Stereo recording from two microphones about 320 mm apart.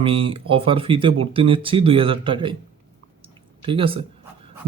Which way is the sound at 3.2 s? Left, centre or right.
Centre.